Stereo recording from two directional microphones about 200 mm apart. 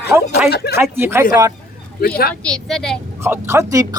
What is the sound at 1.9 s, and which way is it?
Speech, 50° left (ahead or behind).